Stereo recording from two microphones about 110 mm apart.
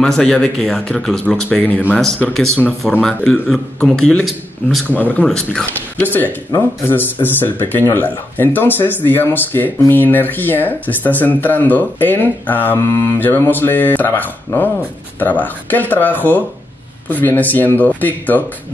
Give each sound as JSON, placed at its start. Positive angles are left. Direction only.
{"t": 0.0, "sound": "a man's voice", "side_deg": 10}
{"t": 4.9, "sound": "speech", "side_deg": 15}